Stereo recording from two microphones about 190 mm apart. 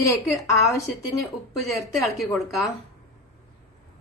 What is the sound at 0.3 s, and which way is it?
Speech, 15° left (ahead or behind).